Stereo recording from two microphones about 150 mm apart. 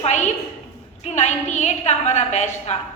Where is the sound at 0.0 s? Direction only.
50° left (ahead or behind).